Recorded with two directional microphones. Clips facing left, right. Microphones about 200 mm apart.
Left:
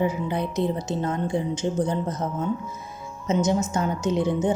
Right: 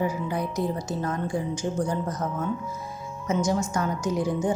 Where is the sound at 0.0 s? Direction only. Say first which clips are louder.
Left 2 dB; 25° left (ahead or behind).